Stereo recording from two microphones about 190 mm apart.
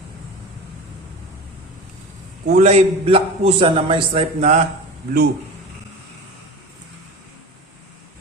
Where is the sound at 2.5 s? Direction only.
35° right (ahead or behind).